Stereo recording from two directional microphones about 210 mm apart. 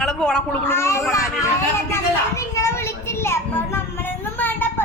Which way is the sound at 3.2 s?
10° left (ahead or behind).